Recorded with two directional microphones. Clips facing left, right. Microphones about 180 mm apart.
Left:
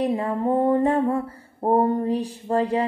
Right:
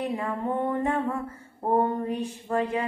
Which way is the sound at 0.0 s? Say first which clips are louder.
Left 6 dB; 35° left (ahead or behind).